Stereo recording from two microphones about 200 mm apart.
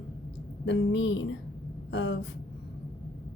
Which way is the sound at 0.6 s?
65° left (ahead or behind).